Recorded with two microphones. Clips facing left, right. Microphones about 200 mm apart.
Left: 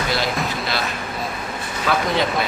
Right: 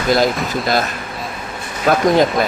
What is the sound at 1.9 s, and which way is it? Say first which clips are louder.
Speech: right 6 dB; 45° right (ahead or behind).